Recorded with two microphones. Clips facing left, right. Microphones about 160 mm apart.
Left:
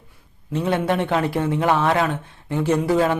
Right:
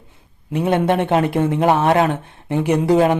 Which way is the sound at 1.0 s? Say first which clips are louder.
Right 4 dB; 20° right (ahead or behind).